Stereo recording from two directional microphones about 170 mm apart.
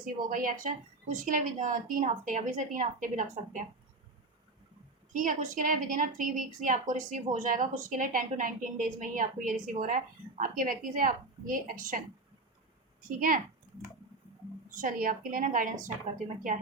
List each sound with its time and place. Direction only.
0.0 s a woman's voice: 55° right (ahead or behind)
5.1 s a woman's voice: 50° right (ahead or behind)
13.1 s speech: 55° right (ahead or behind)
14.7 s a woman's voice: 55° right (ahead or behind)